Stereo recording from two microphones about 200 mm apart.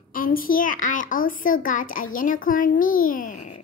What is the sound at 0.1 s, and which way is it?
A child's voice, 45° left (ahead or behind).